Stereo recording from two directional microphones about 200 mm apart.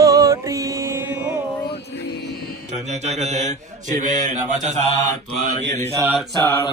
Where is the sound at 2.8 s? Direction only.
35° right (ahead or behind).